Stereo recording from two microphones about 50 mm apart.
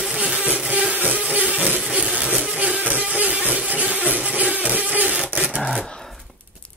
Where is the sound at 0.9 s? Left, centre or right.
Right.